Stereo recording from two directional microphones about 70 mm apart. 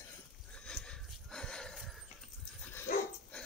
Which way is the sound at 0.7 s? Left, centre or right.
Centre.